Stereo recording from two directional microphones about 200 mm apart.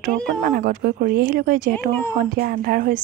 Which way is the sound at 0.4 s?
45° right (ahead or behind).